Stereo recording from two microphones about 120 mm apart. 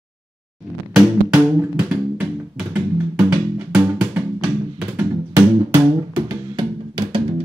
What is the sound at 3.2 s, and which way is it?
Music, 35° right (ahead or behind).